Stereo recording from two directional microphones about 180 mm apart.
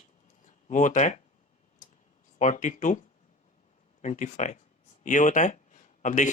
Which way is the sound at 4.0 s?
45° left (ahead or behind).